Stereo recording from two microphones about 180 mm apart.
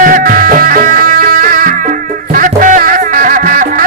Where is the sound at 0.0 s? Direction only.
50° right (ahead or behind).